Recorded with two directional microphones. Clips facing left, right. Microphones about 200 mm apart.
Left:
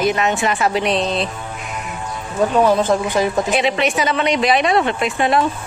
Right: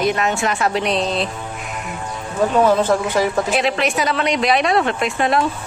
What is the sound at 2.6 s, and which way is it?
Speech, 15° left (ahead or behind).